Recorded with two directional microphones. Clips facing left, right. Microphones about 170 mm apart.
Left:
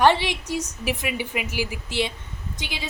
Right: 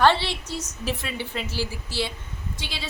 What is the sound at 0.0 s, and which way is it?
A woman's voice, 15° left (ahead or behind).